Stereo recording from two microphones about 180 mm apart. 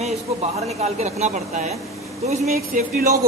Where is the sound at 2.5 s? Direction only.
55° right (ahead or behind).